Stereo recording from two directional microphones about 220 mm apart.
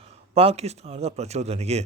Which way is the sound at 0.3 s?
30° right (ahead or behind).